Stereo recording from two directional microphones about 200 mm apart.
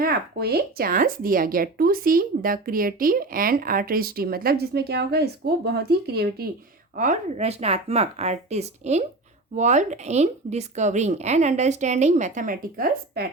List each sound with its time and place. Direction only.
0.0 s speech: 50° right (ahead or behind)
6.9 s speech: 40° right (ahead or behind)